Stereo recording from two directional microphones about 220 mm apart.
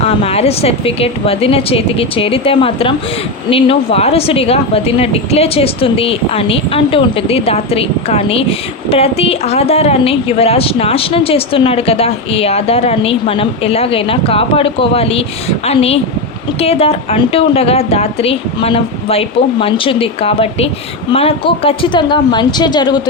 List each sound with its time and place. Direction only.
0.0 s speech: 25° left (ahead or behind)